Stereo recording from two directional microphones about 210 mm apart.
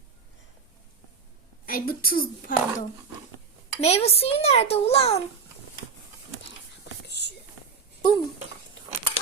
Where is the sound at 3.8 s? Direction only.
30° left (ahead or behind).